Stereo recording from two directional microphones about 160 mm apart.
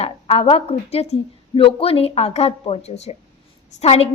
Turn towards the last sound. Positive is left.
turn(degrees=40)  # may be behind; listen again after turning